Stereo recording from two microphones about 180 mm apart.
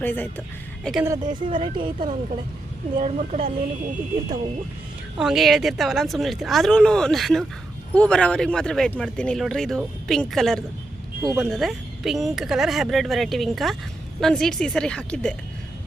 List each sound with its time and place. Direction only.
0.0 s speech: 10° left (ahead or behind)
1.0 s speech: 15° right (ahead or behind)
1.5 s speech: 25° right (ahead or behind)
3.0 s speech: 40° right (ahead or behind)
5.1 s speech: centre (ahead or behind)
11.2 s speech: 20° right (ahead or behind)
11.4 s speech: centre (ahead or behind)